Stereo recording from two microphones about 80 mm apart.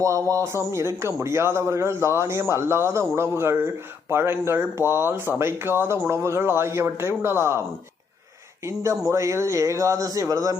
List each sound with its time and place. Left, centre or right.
0.0 s speech: right
8.6 s speech: right